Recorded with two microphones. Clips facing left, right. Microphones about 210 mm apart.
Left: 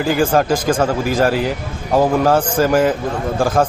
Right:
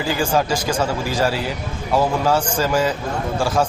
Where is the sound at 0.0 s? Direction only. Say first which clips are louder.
Left 5 dB; 55° left (ahead or behind).